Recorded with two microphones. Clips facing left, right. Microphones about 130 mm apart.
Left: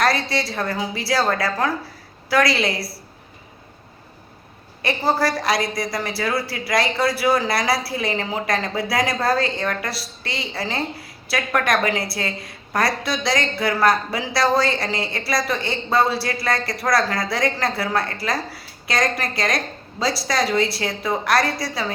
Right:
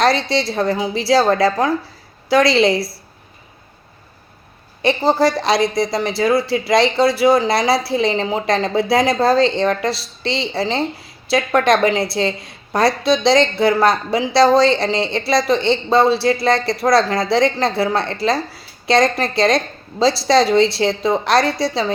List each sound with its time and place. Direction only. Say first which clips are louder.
0.0 s speech: right 5 dB; 25° right (ahead or behind)
4.8 s speech: right 6 dB; 25° right (ahead or behind)